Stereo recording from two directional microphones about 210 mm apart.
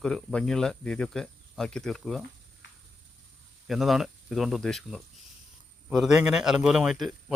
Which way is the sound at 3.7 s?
Centre (ahead or behind).